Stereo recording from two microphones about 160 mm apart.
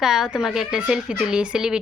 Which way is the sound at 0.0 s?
5° right (ahead or behind).